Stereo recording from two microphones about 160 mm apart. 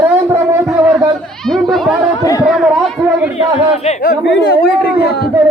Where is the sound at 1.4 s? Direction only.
Centre (ahead or behind).